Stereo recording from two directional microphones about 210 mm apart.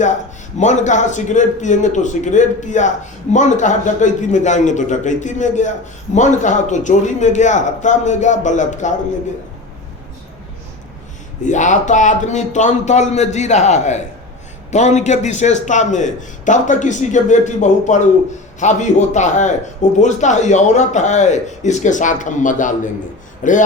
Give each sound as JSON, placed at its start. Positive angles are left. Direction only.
{"t": 0.6, "sound": "a man's voice", "side_deg": 35}
{"t": 11.4, "sound": "a man's voice", "side_deg": 35}